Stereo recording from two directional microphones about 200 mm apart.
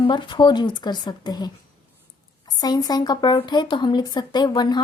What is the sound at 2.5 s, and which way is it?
Speech, 20° left (ahead or behind).